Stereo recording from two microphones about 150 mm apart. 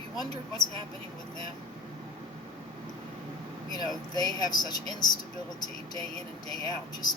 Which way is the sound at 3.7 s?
25° left (ahead or behind).